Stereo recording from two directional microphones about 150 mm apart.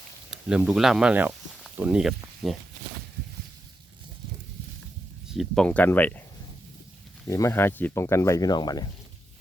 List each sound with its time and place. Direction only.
0.3 s speech: 5° right (ahead or behind)
5.3 s speech: centre (ahead or behind)
5.6 s speech: 10° left (ahead or behind)
7.3 s speech: 20° left (ahead or behind)